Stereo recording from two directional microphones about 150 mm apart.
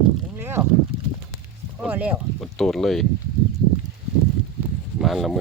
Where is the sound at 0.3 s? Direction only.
15° right (ahead or behind).